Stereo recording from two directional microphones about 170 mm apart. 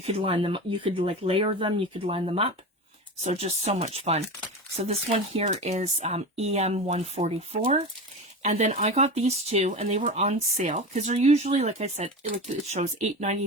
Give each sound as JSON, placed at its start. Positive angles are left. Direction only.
{"t": 0.0, "sound": "speech", "side_deg": -35}